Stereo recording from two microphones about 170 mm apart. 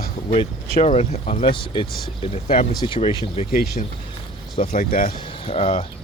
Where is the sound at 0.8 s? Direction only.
40° left (ahead or behind).